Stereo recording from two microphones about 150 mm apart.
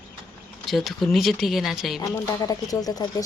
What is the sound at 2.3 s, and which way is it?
Speech, 25° left (ahead or behind).